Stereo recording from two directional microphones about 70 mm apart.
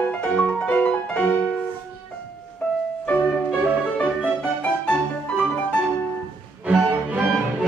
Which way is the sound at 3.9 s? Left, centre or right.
Centre.